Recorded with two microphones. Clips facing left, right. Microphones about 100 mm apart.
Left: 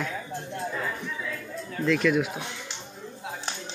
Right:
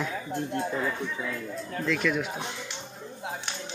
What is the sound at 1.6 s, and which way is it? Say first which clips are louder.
Speech: left 5 dB; centre (ahead or behind).